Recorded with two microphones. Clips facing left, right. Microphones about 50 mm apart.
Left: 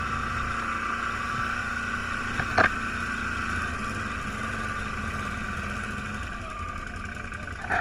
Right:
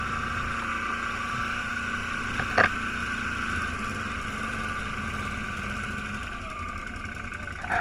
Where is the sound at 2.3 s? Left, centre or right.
Right.